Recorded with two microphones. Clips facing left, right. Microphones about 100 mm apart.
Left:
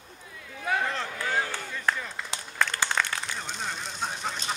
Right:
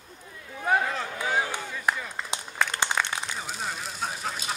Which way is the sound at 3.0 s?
15° right (ahead or behind).